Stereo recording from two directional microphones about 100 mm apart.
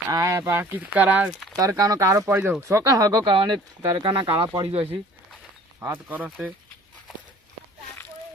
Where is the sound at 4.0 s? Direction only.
45° right (ahead or behind).